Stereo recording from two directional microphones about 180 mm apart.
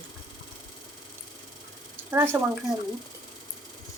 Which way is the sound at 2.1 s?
15° right (ahead or behind).